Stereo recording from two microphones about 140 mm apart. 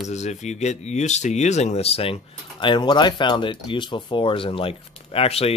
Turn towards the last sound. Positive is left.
turn(degrees=45)  # may be behind; listen again after turning